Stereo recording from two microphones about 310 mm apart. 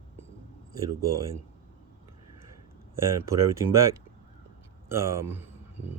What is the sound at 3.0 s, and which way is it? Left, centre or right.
Speech, centre.